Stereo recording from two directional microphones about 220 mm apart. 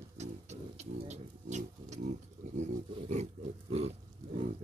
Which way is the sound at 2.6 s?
30° right (ahead or behind).